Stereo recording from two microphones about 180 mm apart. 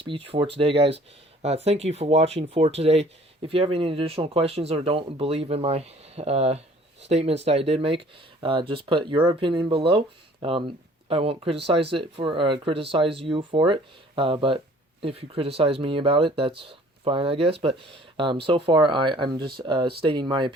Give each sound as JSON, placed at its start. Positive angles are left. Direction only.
{"t": 0.0, "sound": "speech", "side_deg": -30}